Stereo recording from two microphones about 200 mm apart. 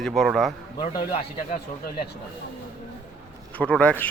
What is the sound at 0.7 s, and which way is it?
Speech, 25° left (ahead or behind).